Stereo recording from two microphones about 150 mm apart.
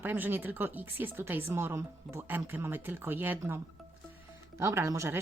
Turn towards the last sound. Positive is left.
turn(degrees=-20)  # may be behind; listen again after turning